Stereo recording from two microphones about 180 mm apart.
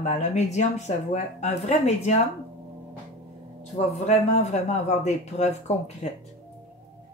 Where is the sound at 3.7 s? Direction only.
40° left (ahead or behind).